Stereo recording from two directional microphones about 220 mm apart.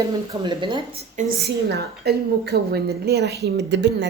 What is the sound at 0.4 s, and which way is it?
Speech, 20° right (ahead or behind).